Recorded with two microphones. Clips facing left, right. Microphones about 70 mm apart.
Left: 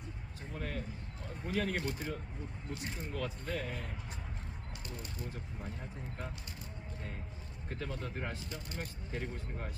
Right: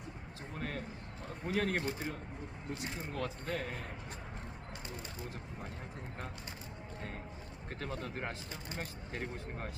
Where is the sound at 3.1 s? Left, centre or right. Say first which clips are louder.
Even; right.